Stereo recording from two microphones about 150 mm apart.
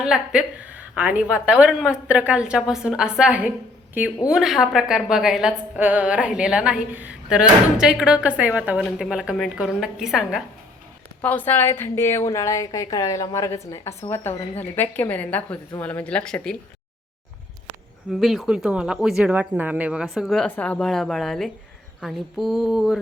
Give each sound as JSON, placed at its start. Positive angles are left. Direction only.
{"t": 0.0, "sound": "a woman's voice", "side_deg": -5}
{"t": 11.2, "sound": "a woman's voice", "side_deg": 10}
{"t": 18.1, "sound": "a woman's voice", "side_deg": 0}